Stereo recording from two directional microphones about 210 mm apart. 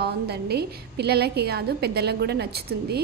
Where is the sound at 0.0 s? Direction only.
50° right (ahead or behind).